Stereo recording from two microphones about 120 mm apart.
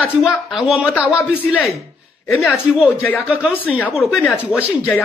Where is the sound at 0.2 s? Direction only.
Centre (ahead or behind).